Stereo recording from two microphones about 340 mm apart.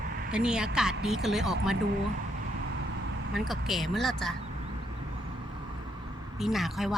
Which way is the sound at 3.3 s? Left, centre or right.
Centre.